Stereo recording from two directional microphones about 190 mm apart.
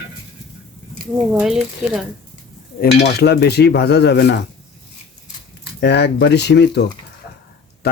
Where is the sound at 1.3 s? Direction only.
5° right (ahead or behind).